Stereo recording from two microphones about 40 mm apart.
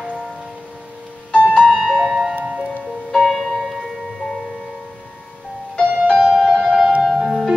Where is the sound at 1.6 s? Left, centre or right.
Centre.